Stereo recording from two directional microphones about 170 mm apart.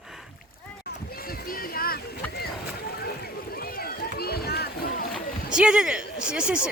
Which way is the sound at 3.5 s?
60° left (ahead or behind).